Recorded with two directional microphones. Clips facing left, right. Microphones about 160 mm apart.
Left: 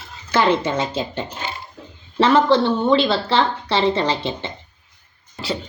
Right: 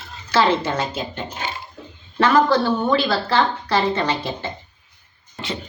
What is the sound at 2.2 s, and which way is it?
Speech, 25° left (ahead or behind).